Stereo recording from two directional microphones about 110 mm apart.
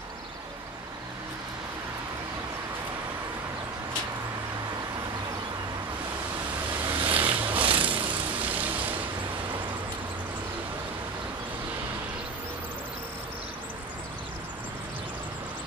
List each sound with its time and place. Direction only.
6.9 s boat: 50° right (ahead or behind)
7.4 s a sound: 50° right (ahead or behind)
8.5 s vehicle: 15° right (ahead or behind)